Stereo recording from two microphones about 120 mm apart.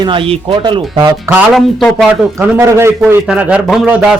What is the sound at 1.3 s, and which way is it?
A man's voice, 25° right (ahead or behind).